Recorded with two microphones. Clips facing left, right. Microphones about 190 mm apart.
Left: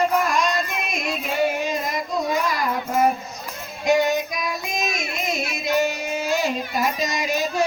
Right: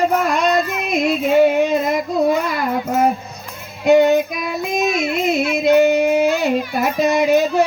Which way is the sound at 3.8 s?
60° right (ahead or behind).